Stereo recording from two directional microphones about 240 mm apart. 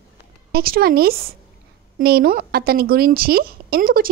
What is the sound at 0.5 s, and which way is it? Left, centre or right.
A woman's voice, right.